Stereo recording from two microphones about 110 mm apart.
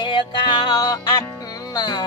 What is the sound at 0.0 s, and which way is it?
Music, 45° left (ahead or behind).